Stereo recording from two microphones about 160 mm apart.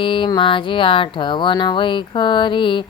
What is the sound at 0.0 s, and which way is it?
Music, 30° left (ahead or behind).